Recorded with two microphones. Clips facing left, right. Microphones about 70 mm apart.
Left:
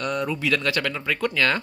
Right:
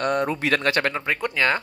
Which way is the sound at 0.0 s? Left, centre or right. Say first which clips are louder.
Right 3 dB; right.